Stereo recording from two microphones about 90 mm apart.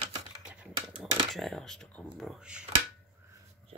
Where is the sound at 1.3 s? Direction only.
5° left (ahead or behind).